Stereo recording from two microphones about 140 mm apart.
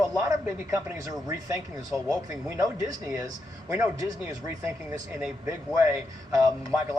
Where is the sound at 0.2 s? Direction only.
25° right (ahead or behind).